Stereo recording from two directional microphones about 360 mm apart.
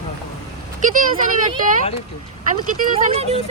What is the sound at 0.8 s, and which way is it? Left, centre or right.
Speech, right.